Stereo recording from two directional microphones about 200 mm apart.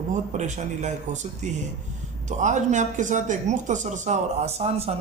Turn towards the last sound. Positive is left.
turn(degrees=-35)  # may be behind; listen again after turning